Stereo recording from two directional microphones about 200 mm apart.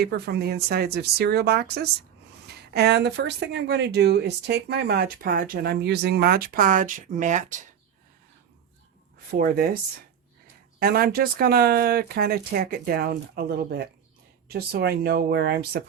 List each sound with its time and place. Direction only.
0.0 s speech: 55° right (ahead or behind); by 7.6 s 40° right (ahead or behind)
9.3 s speech: 45° right (ahead or behind)
10.8 s speech: 50° right (ahead or behind)